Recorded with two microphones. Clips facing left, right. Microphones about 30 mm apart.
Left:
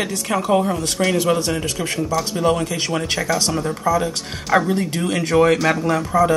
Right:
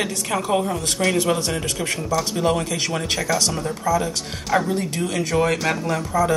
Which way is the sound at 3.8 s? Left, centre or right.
Left.